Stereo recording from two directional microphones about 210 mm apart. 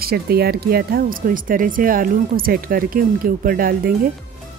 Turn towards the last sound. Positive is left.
turn(degrees=-45)  # may be behind; listen again after turning